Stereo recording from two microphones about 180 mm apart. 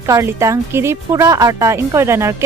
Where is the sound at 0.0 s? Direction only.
15° right (ahead or behind).